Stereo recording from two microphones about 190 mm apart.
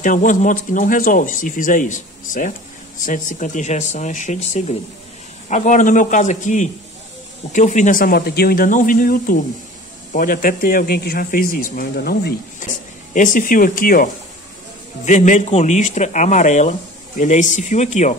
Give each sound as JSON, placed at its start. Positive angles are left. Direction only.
{"t": 0.0, "sound": "a man's voice", "side_deg": 45}
{"t": 15.0, "sound": "speech", "side_deg": 40}